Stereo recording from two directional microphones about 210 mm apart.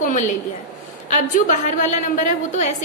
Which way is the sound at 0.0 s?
40° left (ahead or behind).